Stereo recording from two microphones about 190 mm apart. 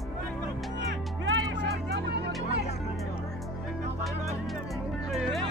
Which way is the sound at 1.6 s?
65° right (ahead or behind).